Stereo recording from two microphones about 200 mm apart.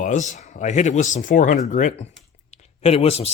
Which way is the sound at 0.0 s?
40° left (ahead or behind).